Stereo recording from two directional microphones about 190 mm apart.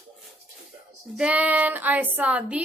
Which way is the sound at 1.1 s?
5° right (ahead or behind).